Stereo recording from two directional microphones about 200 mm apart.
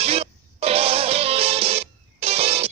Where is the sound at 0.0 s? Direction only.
30° right (ahead or behind).